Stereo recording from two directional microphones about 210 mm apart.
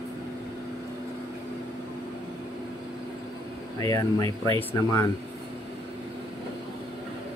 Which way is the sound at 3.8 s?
15° left (ahead or behind).